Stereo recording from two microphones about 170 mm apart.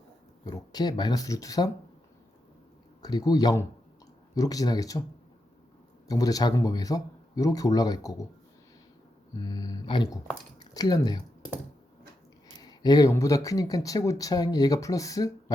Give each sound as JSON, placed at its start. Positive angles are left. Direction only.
{"t": 0.4, "sound": "speech", "side_deg": 25}
{"t": 3.0, "sound": "speech", "side_deg": 25}
{"t": 6.1, "sound": "speech", "side_deg": 20}
{"t": 9.3, "sound": "speech", "side_deg": 20}
{"t": 12.6, "sound": "speech", "side_deg": 25}